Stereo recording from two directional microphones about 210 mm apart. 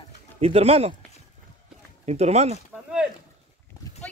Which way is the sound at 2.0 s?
30° right (ahead or behind).